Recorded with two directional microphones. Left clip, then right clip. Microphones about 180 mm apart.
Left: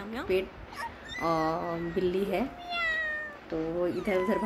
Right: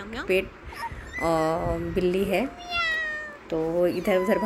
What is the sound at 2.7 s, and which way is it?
Cat, 5° left (ahead or behind).